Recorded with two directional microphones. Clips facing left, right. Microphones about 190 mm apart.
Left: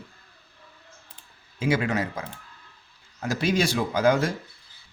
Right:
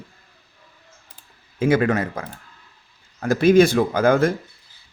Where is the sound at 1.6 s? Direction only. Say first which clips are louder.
Right 6 dB; 50° right (ahead or behind).